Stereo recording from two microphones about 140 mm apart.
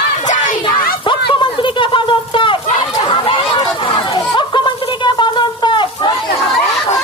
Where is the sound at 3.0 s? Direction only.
40° left (ahead or behind).